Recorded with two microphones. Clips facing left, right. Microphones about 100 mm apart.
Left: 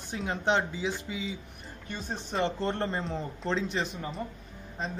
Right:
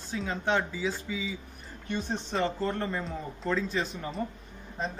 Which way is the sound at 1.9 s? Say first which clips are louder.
Right 4 dB; 10° left (ahead or behind).